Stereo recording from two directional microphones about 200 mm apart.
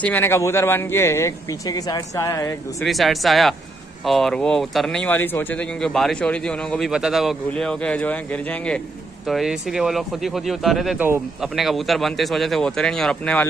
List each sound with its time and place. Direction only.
0.0 s a man's voice: 10° left (ahead or behind)
2.8 s a man's voice: centre (ahead or behind)